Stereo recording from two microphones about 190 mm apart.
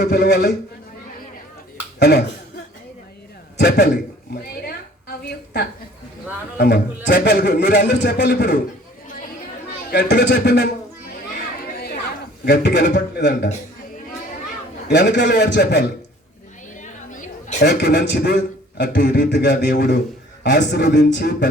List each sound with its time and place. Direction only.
0.0 s a man's voice: 60° left (ahead or behind)
2.0 s a man's voice: 60° left (ahead or behind)
3.6 s a man's voice: 60° left (ahead or behind)
6.6 s a man's voice: 60° left (ahead or behind)
9.9 s a man's voice: 60° left (ahead or behind)
11.6 s chatter: 55° left (ahead or behind)
12.5 s a man's voice: 60° left (ahead or behind)
14.8 s a man's voice: 60° left (ahead or behind)
16.8 s chatter: 40° left (ahead or behind)
17.6 s a man's voice: 60° left (ahead or behind)